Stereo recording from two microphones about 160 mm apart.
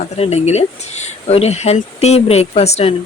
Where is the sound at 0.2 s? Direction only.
40° left (ahead or behind).